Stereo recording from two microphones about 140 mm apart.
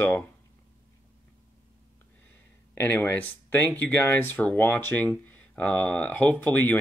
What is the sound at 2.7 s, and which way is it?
Speech, 15° left (ahead or behind).